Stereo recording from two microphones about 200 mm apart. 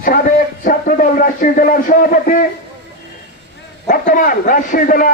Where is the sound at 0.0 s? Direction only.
45° left (ahead or behind).